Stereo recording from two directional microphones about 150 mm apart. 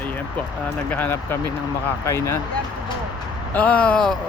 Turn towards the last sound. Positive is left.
turn(degrees=5)  # may be behind; listen again after turning